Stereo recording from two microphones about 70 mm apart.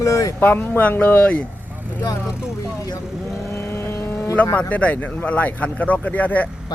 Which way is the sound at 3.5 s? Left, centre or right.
Left.